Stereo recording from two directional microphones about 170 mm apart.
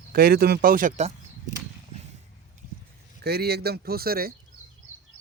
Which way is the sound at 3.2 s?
70° right (ahead or behind).